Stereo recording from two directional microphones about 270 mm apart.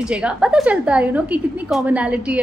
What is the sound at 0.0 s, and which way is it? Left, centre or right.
A woman's voice, centre.